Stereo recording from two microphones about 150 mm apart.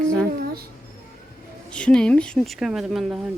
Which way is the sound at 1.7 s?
5° left (ahead or behind).